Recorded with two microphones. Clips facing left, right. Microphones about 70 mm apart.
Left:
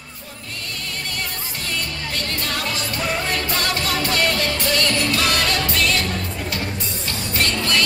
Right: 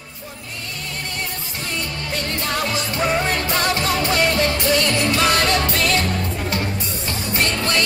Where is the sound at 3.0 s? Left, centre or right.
Right.